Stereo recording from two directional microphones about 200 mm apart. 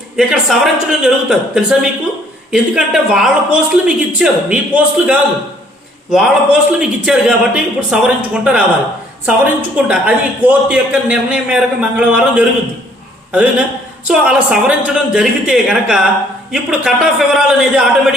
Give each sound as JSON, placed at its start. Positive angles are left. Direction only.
{"t": 0.2, "sound": "a man's voice", "side_deg": 0}
{"t": 14.1, "sound": "speech", "side_deg": -5}